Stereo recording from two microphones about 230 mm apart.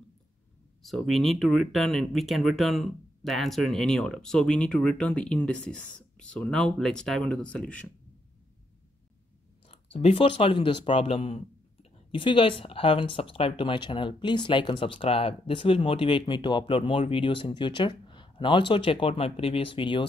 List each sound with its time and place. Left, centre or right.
0.8 s speech: centre
9.7 s speech: left